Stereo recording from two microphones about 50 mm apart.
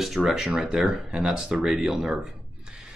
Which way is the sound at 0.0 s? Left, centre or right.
Centre.